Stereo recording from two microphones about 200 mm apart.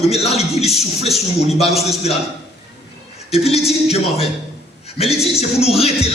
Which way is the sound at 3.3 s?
30° left (ahead or behind).